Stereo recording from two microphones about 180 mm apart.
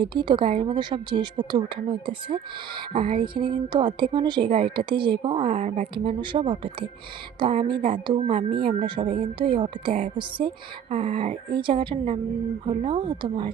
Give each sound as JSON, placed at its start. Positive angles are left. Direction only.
{"t": 0.0, "sound": "a woman's voice", "side_deg": -25}